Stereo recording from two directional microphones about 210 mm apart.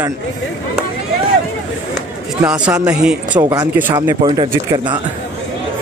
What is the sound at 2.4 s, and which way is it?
Speech, 5° right (ahead or behind).